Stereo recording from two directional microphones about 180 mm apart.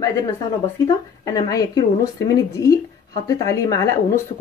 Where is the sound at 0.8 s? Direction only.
20° left (ahead or behind).